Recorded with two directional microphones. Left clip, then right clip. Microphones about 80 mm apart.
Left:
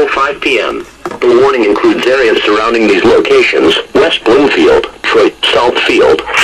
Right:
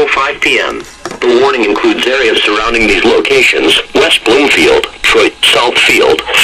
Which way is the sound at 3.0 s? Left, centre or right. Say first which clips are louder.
Left 2 dB; left.